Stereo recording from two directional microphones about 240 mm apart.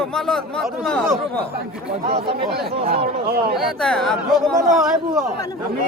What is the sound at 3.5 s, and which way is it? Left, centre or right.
Speech, centre.